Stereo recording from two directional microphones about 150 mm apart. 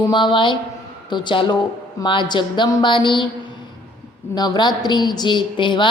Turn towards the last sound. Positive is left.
turn(degrees=30)  # may be behind; listen again after turning